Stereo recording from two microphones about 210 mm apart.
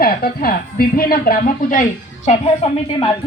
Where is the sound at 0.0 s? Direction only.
45° left (ahead or behind).